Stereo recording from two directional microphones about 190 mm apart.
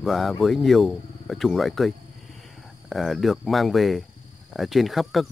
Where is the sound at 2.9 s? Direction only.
Centre (ahead or behind).